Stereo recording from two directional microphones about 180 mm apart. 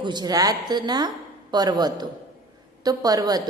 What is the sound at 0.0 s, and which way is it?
A woman's voice, 25° right (ahead or behind).